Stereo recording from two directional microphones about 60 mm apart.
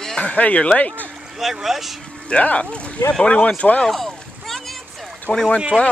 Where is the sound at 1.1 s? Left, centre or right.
Centre.